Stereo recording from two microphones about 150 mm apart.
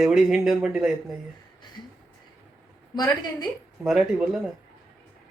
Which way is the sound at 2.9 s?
30° left (ahead or behind).